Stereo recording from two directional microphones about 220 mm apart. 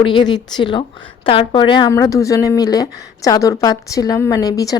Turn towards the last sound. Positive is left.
turn(degrees=15)  # may be behind; listen again after turning